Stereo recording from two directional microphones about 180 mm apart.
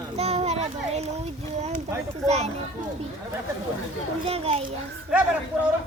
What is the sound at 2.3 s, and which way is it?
Speech, 35° right (ahead or behind).